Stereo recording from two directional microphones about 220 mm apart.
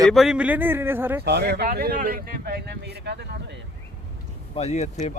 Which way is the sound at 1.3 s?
45° right (ahead or behind).